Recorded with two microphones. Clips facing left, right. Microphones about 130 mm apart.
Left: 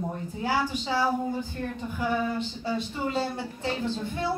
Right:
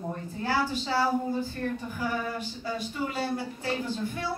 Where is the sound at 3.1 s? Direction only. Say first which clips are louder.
Left 3 dB; 25° left (ahead or behind).